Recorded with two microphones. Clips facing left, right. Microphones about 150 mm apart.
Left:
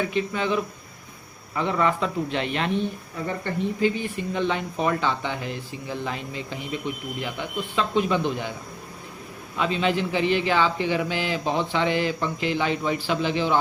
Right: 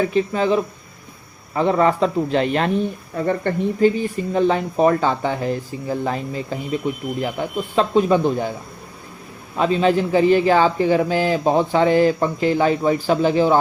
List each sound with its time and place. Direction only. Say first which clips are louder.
0.0 s speech: right 7 dB; 35° right (ahead or behind)
9.6 s speech: right 7 dB; 40° right (ahead or behind)